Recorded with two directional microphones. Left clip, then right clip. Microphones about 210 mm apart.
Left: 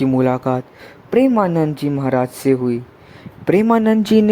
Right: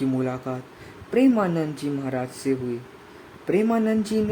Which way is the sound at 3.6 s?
40° left (ahead or behind).